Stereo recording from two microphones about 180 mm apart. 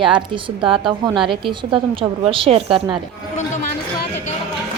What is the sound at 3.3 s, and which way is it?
Speech, 40° left (ahead or behind).